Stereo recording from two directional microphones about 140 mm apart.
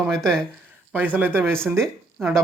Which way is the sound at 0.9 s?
10° right (ahead or behind).